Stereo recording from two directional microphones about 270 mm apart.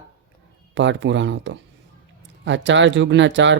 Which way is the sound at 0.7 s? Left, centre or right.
Right.